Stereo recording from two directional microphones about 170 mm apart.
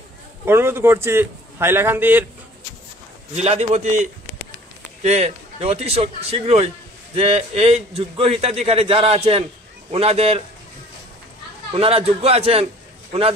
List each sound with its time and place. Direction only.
0.5 s a man's voice: 15° right (ahead or behind)
3.3 s a man's voice: 40° right (ahead or behind)
11.7 s a man's voice: 35° right (ahead or behind)